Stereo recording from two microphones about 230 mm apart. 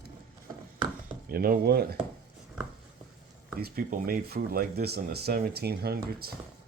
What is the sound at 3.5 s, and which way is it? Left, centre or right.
Speech, right.